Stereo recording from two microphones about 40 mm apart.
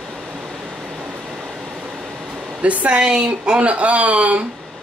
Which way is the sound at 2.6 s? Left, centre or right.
Right.